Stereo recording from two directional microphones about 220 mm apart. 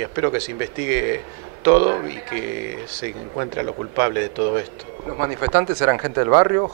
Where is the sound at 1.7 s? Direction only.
25° right (ahead or behind).